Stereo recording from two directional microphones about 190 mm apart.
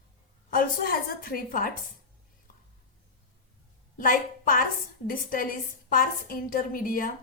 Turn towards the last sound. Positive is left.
turn(degrees=50)  # may be behind; listen again after turning